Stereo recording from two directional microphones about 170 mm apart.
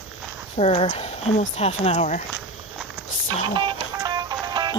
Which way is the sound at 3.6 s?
25° right (ahead or behind).